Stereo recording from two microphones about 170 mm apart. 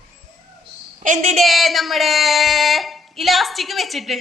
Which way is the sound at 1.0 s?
45° right (ahead or behind).